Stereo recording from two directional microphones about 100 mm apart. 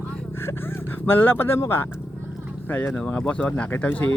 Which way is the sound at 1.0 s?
20° left (ahead or behind).